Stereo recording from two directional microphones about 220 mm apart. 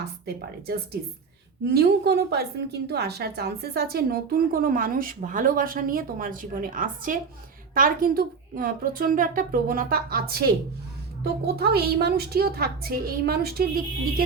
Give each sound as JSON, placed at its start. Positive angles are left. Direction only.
{"t": 1.7, "sound": "a woman's voice", "side_deg": -45}